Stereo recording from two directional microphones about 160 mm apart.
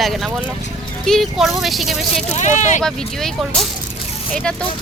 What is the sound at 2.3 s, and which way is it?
Speech, 50° left (ahead or behind).